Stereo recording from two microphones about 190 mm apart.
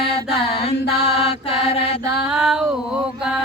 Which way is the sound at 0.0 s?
30° left (ahead or behind).